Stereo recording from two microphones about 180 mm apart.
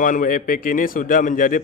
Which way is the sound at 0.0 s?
50° left (ahead or behind).